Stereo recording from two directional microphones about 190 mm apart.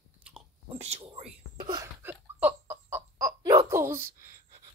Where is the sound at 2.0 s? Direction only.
10° right (ahead or behind).